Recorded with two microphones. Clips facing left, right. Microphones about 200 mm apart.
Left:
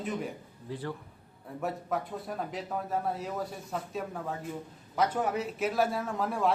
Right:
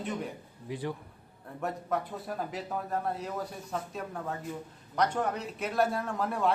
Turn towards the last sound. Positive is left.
turn(degrees=0)  # may be behind; listen again after turning